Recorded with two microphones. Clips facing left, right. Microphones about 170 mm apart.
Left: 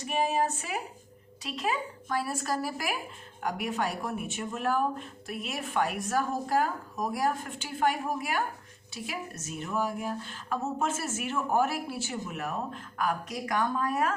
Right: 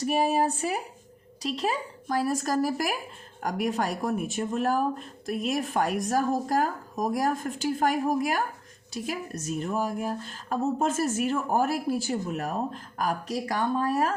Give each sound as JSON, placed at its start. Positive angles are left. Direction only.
{"t": 0.0, "sound": "speech", "side_deg": -35}